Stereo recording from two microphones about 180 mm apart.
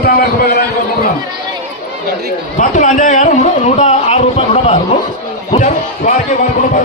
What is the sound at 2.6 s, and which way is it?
A man's voice, 45° left (ahead or behind).